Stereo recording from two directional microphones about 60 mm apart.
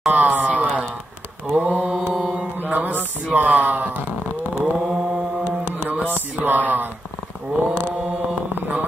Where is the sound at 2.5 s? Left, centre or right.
Right.